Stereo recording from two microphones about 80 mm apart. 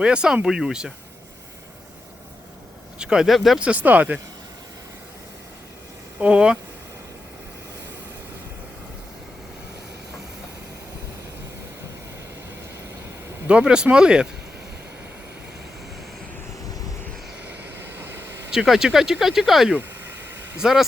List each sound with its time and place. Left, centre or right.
0.0 s speech: centre
3.0 s speech: centre
3.6 s speech: centre
6.1 s speech: centre
13.5 s speech: centre
17.5 s vehicle: right
18.5 s speech: centre
19.7 s a sound: right
20.6 s speech: centre